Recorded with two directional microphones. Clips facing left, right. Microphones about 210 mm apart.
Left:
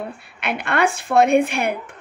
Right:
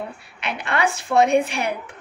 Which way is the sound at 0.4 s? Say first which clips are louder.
Left 3 dB; 55° left (ahead or behind).